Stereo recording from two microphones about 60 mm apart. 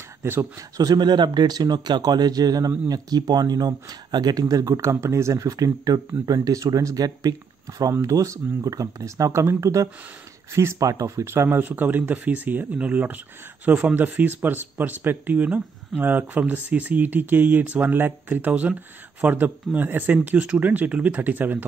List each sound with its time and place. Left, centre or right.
0.2 s speech: right
0.6 s speech: right
7.9 s speech: right
10.8 s speech: right
11.1 s speech: right
20.2 s speech: right